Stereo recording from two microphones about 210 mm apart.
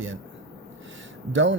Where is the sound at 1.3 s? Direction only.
65° right (ahead or behind).